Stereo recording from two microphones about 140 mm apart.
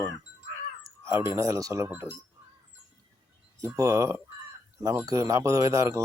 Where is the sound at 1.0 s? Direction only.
20° right (ahead or behind).